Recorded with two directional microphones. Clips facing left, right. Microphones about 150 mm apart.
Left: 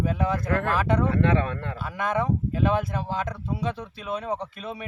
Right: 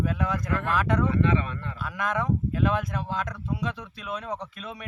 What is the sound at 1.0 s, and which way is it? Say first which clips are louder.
Speech: left 2 dB; 65° left (ahead or behind).